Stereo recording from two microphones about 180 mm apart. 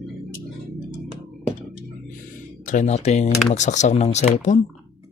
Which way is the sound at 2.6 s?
45° left (ahead or behind).